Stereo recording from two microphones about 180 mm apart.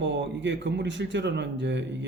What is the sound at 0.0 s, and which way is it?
Speech, 80° right.